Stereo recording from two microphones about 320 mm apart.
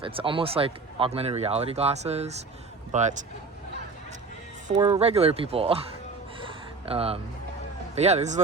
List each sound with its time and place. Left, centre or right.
0.0 s speech: centre
4.8 s speech: centre
6.4 s a sound: centre
7.9 s speech: centre